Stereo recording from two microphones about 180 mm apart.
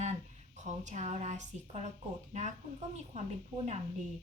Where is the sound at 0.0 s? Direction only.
40° right (ahead or behind).